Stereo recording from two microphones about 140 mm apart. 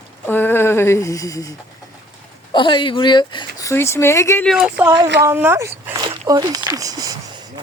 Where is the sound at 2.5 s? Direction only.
35° left (ahead or behind).